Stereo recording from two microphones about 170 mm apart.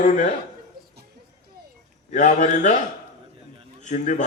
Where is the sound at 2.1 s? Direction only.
45° left (ahead or behind).